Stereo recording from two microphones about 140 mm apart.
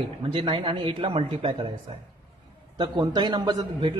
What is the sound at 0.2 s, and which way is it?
Speech, 40° right (ahead or behind).